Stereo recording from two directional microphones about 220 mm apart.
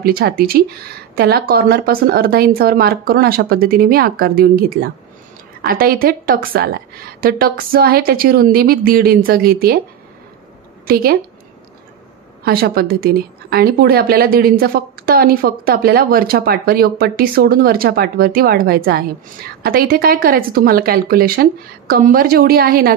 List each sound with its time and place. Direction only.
0.0 s a woman's voice: 45° right (ahead or behind)
10.9 s speech: 45° right (ahead or behind)
12.4 s speech: 45° right (ahead or behind)